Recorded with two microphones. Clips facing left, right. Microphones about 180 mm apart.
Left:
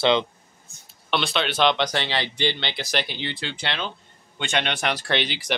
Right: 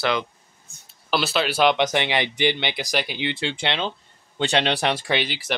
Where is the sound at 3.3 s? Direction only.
25° right (ahead or behind).